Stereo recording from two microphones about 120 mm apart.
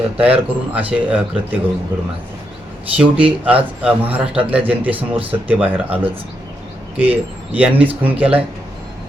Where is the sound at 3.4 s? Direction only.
10° right (ahead or behind).